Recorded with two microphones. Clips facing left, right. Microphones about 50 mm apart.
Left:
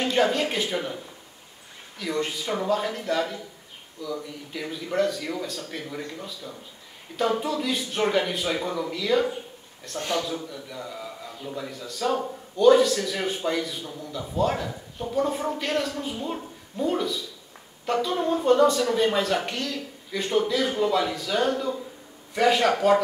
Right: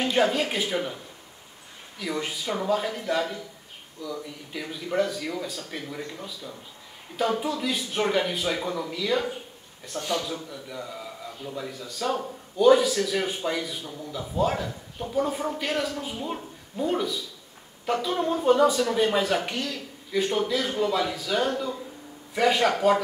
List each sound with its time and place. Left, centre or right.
0.0 s speech: centre
2.0 s speech: centre
9.9 s a man's voice: left
10.5 s a man's voice: centre